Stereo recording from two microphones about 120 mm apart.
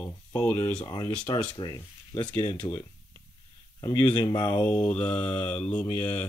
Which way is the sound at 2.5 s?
20° left (ahead or behind).